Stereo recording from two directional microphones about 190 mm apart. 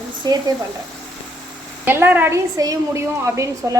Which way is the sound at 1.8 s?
10° right (ahead or behind).